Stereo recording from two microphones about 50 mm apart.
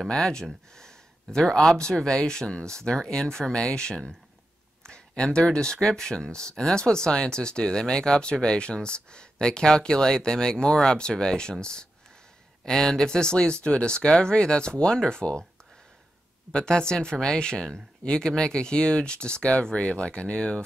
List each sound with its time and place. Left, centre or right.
0.0 s speech: centre
16.5 s speech: centre